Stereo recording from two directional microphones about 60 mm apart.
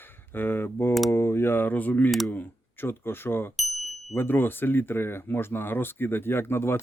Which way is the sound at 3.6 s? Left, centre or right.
Centre.